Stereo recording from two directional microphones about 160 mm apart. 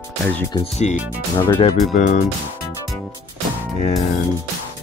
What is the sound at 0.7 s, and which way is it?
Speech, 45° left (ahead or behind).